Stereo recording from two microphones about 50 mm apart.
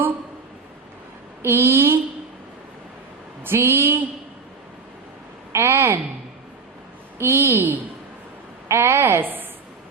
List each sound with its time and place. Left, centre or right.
1.4 s speech: right
3.4 s speech: right
5.5 s a woman's voice: right
7.2 s a woman's voice: right
8.6 s a woman's voice: right